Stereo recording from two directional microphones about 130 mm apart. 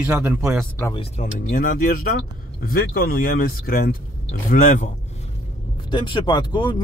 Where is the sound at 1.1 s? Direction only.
65° left (ahead or behind); by 2.0 s 90° left.